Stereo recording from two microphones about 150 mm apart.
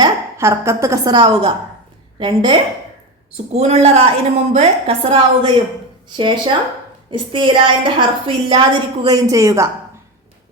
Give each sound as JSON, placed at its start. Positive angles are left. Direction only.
{"t": 0.0, "sound": "a woman's voice", "side_deg": -20}
{"t": 3.5, "sound": "a woman's voice", "side_deg": -40}